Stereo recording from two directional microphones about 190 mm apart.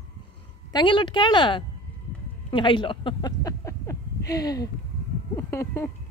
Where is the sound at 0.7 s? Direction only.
25° left (ahead or behind).